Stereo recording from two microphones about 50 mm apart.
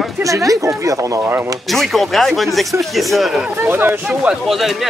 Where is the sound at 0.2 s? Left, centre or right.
Right.